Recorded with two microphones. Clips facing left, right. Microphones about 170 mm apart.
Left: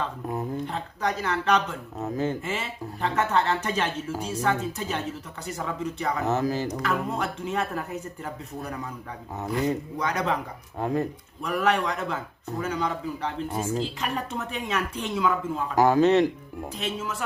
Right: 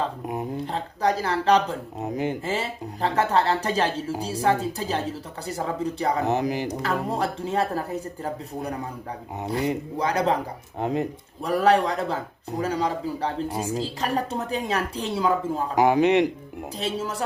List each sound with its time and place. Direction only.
0.5 s speech: 35° right (ahead or behind)
2.0 s speech: 15° right (ahead or behind)
2.4 s speech: 35° right (ahead or behind)
6.2 s speech: 15° right (ahead or behind)
6.7 s speech: 30° right (ahead or behind)
10.0 s speech: 30° right (ahead or behind)
10.8 s speech: 20° right (ahead or behind)
11.4 s speech: 35° right (ahead or behind)
15.7 s speech: 20° right (ahead or behind)
16.7 s speech: 35° right (ahead or behind)